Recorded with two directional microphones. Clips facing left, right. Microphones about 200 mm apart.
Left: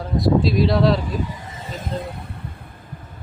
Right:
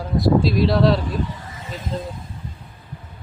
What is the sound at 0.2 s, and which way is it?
Speech, centre (ahead or behind).